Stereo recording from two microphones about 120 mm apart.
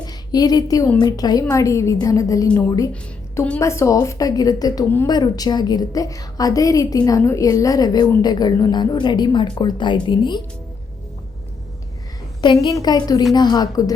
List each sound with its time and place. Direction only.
0.0 s a woman's voice: 35° left (ahead or behind)
12.7 s a woman's voice: 35° left (ahead or behind)